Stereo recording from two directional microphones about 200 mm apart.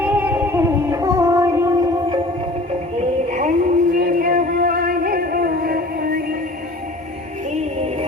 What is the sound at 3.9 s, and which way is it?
Music, 45° right (ahead or behind).